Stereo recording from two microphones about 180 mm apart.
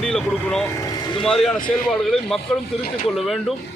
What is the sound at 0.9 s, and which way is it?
Vehicle, 25° left (ahead or behind).